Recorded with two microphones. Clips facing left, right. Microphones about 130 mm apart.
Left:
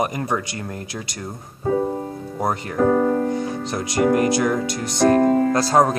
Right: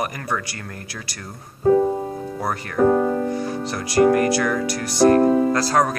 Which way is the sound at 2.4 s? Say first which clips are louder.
Even; 20° left (ahead or behind).